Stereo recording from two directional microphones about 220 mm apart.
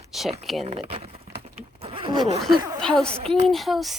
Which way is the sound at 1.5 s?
25° right (ahead or behind).